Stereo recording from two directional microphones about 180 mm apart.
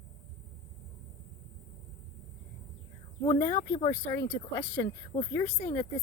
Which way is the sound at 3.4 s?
15° left (ahead or behind).